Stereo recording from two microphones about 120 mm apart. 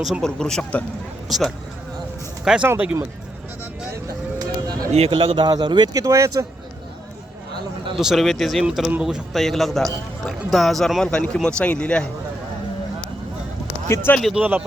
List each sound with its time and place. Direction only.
0.0 s speech: centre (ahead or behind)
2.6 s speech: 15° right (ahead or behind)
3.9 s vehicle: 30° right (ahead or behind)
4.9 s a man's voice: 60° right (ahead or behind)
5.5 s speech: 35° right (ahead or behind)
7.9 s speech: centre (ahead or behind)
13.8 s speech: 20° left (ahead or behind)
14.2 s speech: centre (ahead or behind)